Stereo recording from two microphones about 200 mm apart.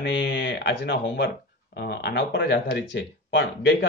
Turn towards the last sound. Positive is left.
turn(degrees=70)  # may be behind; listen again after turning